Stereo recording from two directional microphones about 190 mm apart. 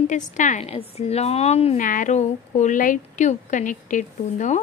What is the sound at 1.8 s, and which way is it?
A woman's voice, 45° left (ahead or behind).